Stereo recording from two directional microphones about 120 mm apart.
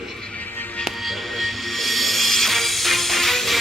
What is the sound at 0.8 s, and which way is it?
Music, centre (ahead or behind).